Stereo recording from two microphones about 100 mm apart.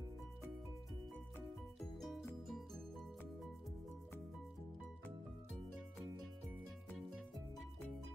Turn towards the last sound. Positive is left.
turn(degrees=0)  # may be behind; listen again after turning